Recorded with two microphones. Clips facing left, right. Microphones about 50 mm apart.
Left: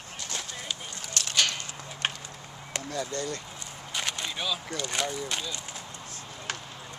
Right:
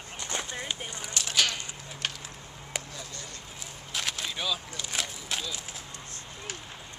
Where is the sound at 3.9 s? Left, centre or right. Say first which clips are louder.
Left 1 dB; centre.